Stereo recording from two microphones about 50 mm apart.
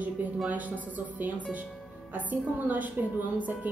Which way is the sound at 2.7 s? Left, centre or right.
Right.